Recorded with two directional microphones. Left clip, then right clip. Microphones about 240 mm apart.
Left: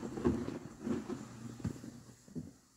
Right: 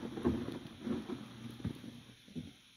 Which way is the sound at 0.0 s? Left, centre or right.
Left.